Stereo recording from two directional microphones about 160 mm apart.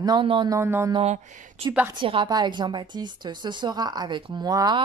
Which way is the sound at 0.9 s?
40° right (ahead or behind).